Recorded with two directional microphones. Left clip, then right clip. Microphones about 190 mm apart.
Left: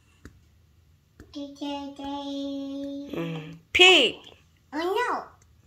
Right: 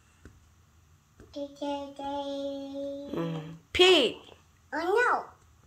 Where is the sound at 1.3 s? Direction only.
15° right (ahead or behind).